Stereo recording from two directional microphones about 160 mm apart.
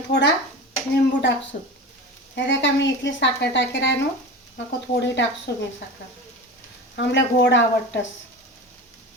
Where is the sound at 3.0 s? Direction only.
90° left.